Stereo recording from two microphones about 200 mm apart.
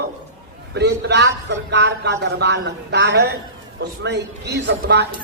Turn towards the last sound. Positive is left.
turn(degrees=-55)  # may be behind; listen again after turning